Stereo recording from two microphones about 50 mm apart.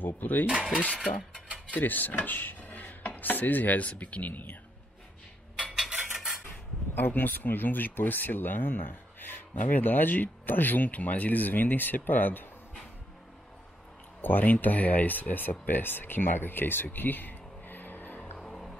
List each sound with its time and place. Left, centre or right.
0.0 s speech: left
1.7 s chopping: left
5.8 s cutlery: centre
7.0 s speech: left
14.2 s speech: left
18.4 s vehicle: centre